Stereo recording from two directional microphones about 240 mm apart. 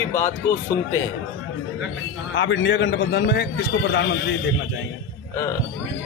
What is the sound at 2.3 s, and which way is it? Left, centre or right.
A man's voice, left.